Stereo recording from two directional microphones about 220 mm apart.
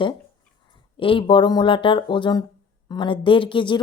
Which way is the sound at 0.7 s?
25° left (ahead or behind).